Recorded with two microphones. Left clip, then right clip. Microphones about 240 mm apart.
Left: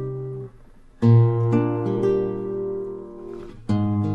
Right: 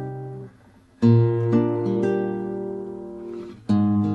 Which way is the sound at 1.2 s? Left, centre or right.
Left.